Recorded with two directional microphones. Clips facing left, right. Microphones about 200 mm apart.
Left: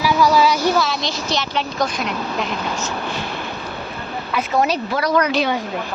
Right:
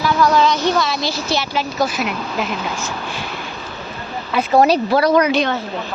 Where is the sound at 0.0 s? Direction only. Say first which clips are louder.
Even; 10° left (ahead or behind).